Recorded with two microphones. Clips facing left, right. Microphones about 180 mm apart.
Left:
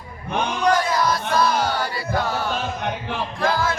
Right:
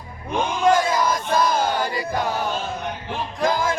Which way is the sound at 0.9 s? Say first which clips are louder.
Even; 15° right (ahead or behind).